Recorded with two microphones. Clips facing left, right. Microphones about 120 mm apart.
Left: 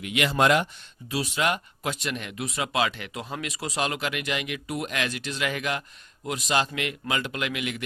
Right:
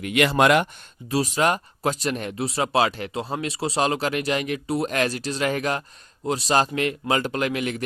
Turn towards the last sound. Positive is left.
turn(degrees=-40)  # may be behind; listen again after turning